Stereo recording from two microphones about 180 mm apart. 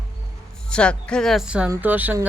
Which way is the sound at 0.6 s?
5° left (ahead or behind).